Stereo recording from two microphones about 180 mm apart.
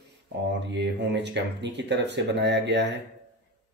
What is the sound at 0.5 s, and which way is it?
Speech, 75° right (ahead or behind).